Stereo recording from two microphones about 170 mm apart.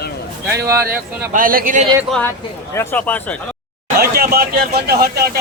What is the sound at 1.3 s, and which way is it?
Speech, 55° right (ahead or behind).